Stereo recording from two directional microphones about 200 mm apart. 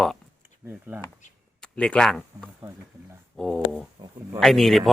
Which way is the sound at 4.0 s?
20° right (ahead or behind).